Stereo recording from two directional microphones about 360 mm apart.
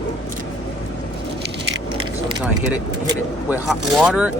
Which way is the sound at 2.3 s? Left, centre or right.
Centre.